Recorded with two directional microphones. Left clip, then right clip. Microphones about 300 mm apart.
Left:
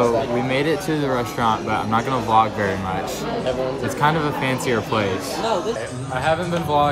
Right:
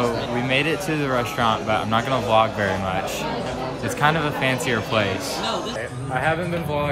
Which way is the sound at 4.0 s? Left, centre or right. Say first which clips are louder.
Even; centre.